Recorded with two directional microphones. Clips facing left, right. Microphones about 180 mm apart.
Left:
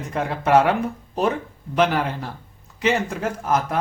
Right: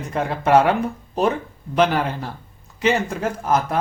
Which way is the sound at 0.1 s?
35° right (ahead or behind).